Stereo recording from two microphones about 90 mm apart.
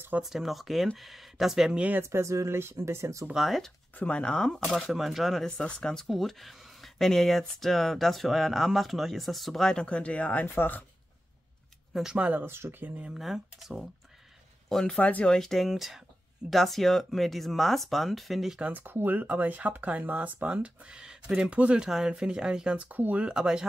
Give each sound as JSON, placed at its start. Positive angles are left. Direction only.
{"t": 0.2, "sound": "speech", "side_deg": -5}
{"t": 2.0, "sound": "speech", "side_deg": -30}
{"t": 3.3, "sound": "speech", "side_deg": 0}
{"t": 3.9, "sound": "speech", "side_deg": 10}
{"t": 11.9, "sound": "speech", "side_deg": -5}
{"t": 12.2, "sound": "speech", "side_deg": -15}
{"t": 13.1, "sound": "speech", "side_deg": 0}
{"t": 15.0, "sound": "speech", "side_deg": 15}
{"t": 18.6, "sound": "speech", "side_deg": -20}